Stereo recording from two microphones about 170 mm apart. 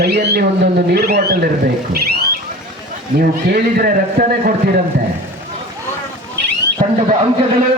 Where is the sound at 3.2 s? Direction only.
60° right (ahead or behind).